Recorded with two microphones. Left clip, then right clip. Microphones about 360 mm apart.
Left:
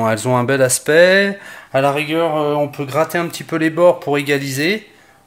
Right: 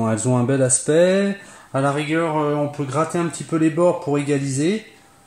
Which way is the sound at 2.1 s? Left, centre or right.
Left.